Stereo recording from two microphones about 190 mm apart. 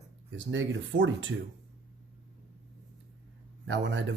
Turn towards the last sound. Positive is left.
turn(degrees=-70)  # may be behind; listen again after turning